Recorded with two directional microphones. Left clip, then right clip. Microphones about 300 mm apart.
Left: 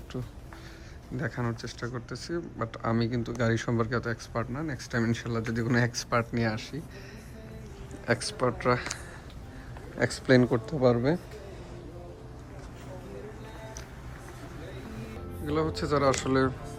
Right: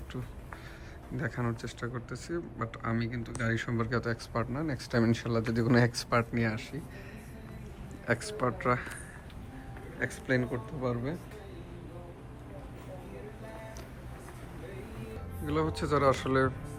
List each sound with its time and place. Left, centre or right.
1.1 s speech: centre
8.0 s speech: centre
10.0 s speech: centre
15.4 s speech: centre